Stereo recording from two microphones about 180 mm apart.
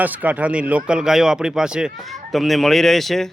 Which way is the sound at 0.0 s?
10° right (ahead or behind).